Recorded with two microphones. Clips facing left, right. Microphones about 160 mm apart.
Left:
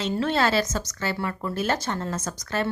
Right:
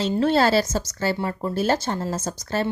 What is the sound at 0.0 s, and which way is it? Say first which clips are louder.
Speech: right 4 dB; 35° right (ahead or behind).